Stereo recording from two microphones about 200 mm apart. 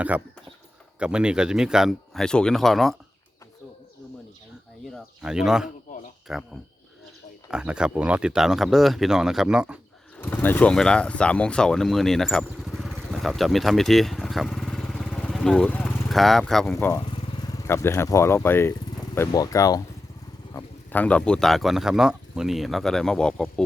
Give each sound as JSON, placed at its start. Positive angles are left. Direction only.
{"t": 0.1, "sound": "speech", "side_deg": -5}
{"t": 4.9, "sound": "speech", "side_deg": -5}
{"t": 10.2, "sound": "speech", "side_deg": 10}
{"t": 16.7, "sound": "speech", "side_deg": 15}